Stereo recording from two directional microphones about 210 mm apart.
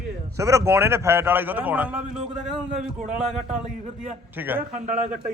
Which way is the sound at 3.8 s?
35° right (ahead or behind).